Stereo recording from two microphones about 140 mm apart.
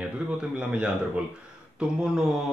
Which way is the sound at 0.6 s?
10° right (ahead or behind).